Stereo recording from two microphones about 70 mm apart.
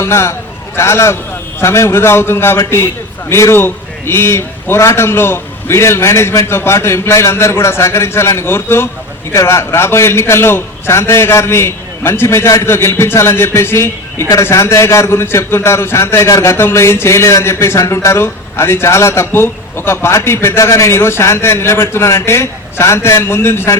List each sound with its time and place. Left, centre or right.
0.0 s a man's voice: left